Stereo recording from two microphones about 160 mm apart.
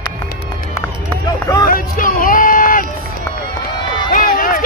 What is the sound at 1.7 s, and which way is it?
Music, 60° left (ahead or behind).